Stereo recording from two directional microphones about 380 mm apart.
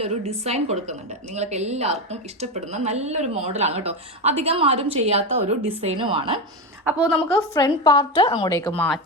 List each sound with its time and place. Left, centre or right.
0.0 s speech: centre
6.8 s a woman's voice: centre
7.5 s a woman's voice: centre